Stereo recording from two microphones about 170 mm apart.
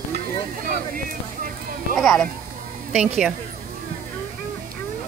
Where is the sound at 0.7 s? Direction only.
55° right (ahead or behind).